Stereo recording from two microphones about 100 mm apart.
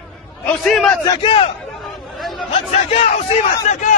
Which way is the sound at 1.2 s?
60° left (ahead or behind).